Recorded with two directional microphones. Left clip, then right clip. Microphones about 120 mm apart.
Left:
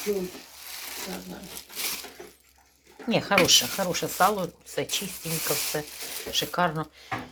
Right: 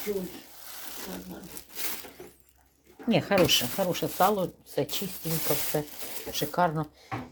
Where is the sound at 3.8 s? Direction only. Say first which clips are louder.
Left 2 dB; 40° right (ahead or behind).